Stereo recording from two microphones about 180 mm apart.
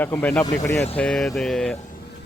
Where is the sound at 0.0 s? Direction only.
10° left (ahead or behind).